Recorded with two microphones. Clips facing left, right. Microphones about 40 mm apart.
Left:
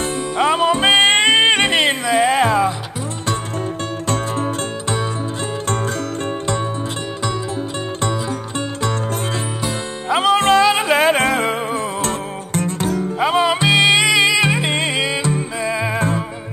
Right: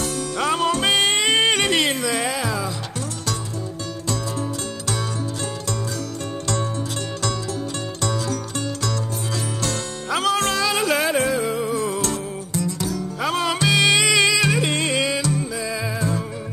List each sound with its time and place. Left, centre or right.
0.0 s music: left
2.3 s music: left
8.0 s music: left
11.1 s music: left
13.2 s music: left
16.0 s music: left